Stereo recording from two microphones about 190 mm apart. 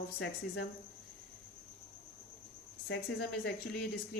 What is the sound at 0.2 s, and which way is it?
Speech, 65° left (ahead or behind).